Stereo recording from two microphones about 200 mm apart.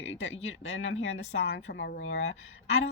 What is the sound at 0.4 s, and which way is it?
Speech, 80° left.